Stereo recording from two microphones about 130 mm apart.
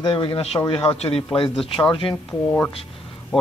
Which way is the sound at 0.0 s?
35° left (ahead or behind).